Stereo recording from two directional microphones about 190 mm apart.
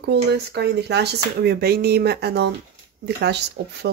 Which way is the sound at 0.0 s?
60° right (ahead or behind).